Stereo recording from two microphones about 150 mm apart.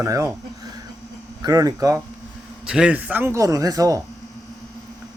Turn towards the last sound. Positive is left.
turn(degrees=-25)  # may be behind; listen again after turning